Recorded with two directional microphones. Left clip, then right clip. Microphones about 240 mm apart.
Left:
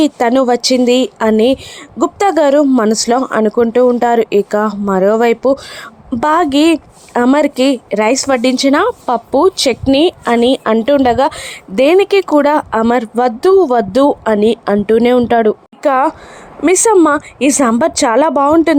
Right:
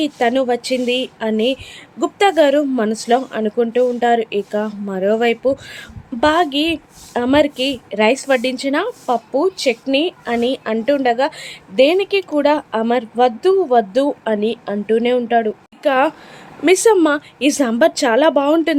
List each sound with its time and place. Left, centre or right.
0.0 s speech: left